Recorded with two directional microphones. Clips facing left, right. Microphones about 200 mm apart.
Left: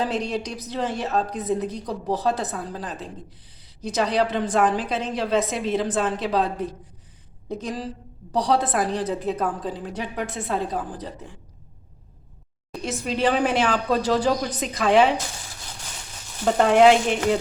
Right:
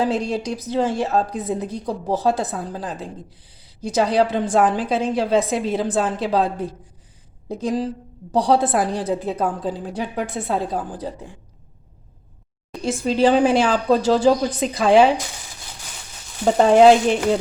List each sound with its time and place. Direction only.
0.3 s a woman's voice: 30° right (ahead or behind)
13.1 s a woman's voice: 30° right (ahead or behind)
16.6 s a woman's voice: 35° right (ahead or behind)